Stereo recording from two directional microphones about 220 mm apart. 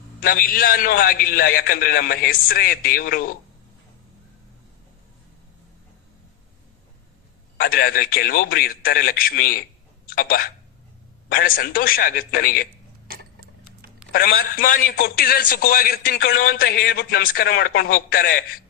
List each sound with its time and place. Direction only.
0.2 s a man's voice: 40° left (ahead or behind)
7.6 s a man's voice: 40° left (ahead or behind)
14.1 s a man's voice: 40° left (ahead or behind)